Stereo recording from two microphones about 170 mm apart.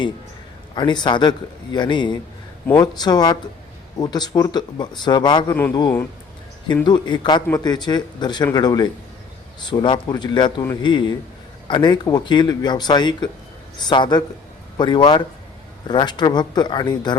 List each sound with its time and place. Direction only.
0.8 s speech: 25° left (ahead or behind)